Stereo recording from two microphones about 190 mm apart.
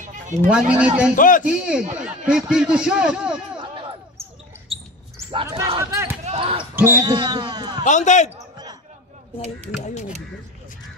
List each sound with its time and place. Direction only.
0.5 s a man's voice: 5° right (ahead or behind)
1.1 s a man's voice: 45° left (ahead or behind)
1.4 s a man's voice: 5° right (ahead or behind)
5.3 s speech: 25° right (ahead or behind)
5.8 s speech: 15° right (ahead or behind)
6.2 s basketball bounce: 30° right (ahead or behind)
6.6 s speech: 10° right (ahead or behind)
7.1 s a man's voice: 20° right (ahead or behind)
7.8 s speech: 40° left (ahead or behind)